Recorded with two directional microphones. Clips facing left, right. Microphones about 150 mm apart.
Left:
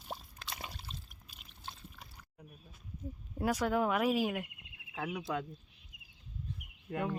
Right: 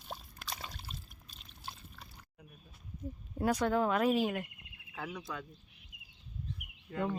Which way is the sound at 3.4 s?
5° left (ahead or behind).